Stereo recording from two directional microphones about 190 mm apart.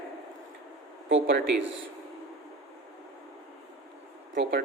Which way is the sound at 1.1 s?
80° right.